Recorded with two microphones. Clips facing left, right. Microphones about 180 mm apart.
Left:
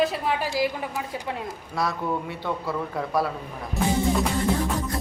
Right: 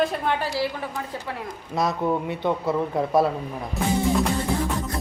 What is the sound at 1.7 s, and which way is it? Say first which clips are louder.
A man's voice: right 4 dB; 20° right (ahead or behind).